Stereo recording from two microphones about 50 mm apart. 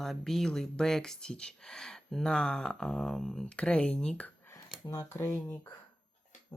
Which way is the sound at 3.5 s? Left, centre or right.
Left.